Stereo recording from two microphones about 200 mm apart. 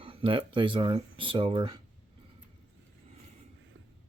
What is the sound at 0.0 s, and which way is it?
Speech, 25° right (ahead or behind).